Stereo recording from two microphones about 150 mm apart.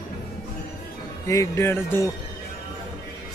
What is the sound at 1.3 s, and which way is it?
Speech, 20° left (ahead or behind).